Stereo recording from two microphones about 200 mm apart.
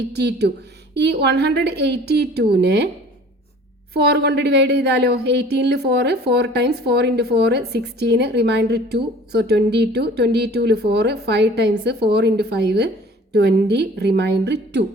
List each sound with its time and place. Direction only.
0.1 s a woman's voice: 55° right (ahead or behind)
3.9 s a woman's voice: 55° right (ahead or behind)